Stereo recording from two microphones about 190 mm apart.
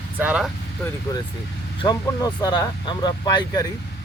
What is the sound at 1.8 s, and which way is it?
Speech, 20° left (ahead or behind).